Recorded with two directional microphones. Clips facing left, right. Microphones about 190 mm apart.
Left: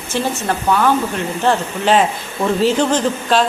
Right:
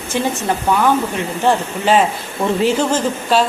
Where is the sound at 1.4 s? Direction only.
10° right (ahead or behind).